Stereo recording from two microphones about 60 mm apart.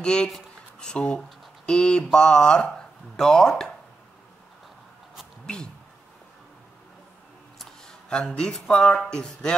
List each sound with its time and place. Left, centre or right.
0.0 s speech: centre
8.1 s speech: centre